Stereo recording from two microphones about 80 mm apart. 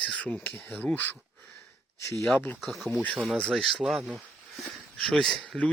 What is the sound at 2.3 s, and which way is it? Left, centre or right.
Speech, left.